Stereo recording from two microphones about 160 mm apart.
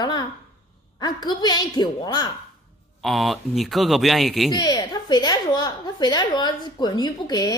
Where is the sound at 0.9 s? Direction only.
25° left (ahead or behind).